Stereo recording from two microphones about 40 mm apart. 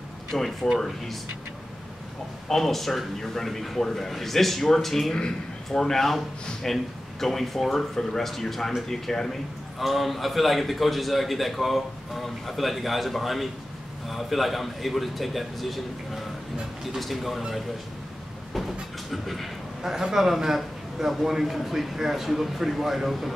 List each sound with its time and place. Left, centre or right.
0.3 s a man's voice: centre
2.4 s a man's voice: centre
16.8 s a man's voice: centre
18.5 s a man's voice: centre
19.8 s a man's voice: centre